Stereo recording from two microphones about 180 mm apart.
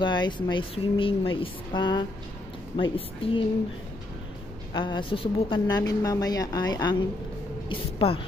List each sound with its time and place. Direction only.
0.0 s a woman's voice: 25° left (ahead or behind)
4.7 s a woman's voice: 25° left (ahead or behind)